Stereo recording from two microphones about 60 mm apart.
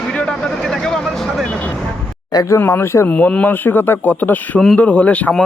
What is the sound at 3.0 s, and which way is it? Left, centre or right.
Speech, left.